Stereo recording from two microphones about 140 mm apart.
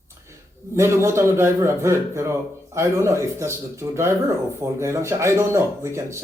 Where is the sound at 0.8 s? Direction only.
20° right (ahead or behind).